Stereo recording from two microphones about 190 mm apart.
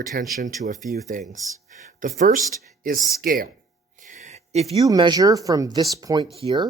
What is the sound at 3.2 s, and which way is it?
Speech, 50° right (ahead or behind).